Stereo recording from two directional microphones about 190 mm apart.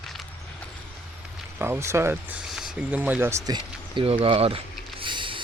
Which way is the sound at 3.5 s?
30° right (ahead or behind).